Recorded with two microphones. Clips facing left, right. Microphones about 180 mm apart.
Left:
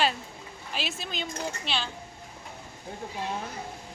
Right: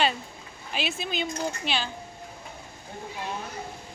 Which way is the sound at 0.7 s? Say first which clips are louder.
Right 4 dB; centre (ahead or behind).